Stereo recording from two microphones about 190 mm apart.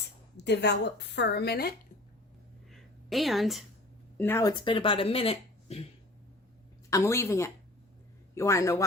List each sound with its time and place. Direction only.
0.3 s a woman's voice: 65° left (ahead or behind)
2.7 s a sound: centre (ahead or behind)
4.2 s a woman's voice: 15° left (ahead or behind)
4.6 s speech: 25° left (ahead or behind)
6.9 s a woman's voice: 15° left (ahead or behind)